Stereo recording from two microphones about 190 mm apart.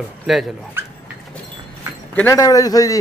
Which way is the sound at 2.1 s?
10° left (ahead or behind).